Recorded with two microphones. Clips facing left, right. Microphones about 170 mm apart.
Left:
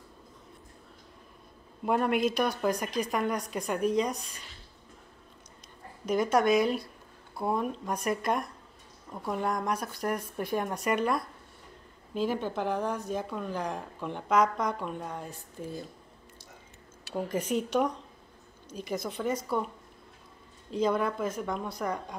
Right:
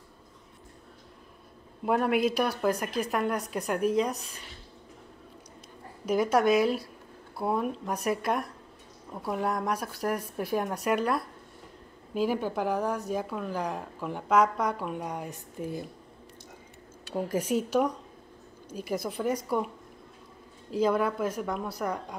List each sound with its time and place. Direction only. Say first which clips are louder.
1.9 s a woman's voice: right 1 dB; 5° right (ahead or behind)
6.0 s a woman's voice: right 1 dB; 5° right (ahead or behind)
15.0 s a woman's voice: right 3 dB; 15° right (ahead or behind)
17.1 s a woman's voice: right 2 dB; 10° right (ahead or behind)
20.7 s a woman's voice: right 2 dB; 5° right (ahead or behind)